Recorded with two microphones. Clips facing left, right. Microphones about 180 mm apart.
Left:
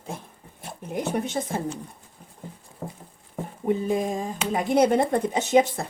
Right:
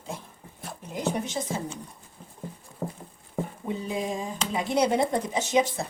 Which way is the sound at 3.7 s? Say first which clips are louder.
Left 8 dB; 50° left (ahead or behind).